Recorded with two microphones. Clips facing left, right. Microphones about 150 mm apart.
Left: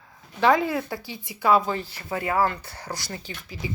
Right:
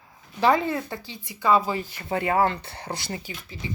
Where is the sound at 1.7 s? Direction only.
15° right (ahead or behind).